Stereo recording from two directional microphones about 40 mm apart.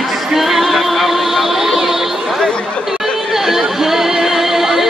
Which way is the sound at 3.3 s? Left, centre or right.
Centre.